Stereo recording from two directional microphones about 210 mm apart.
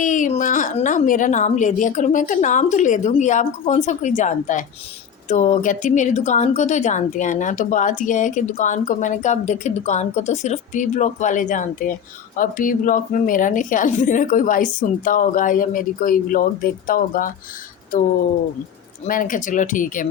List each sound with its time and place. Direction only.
0.0 s a woman's voice: 35° left (ahead or behind)
19.0 s a woman's voice: 40° left (ahead or behind)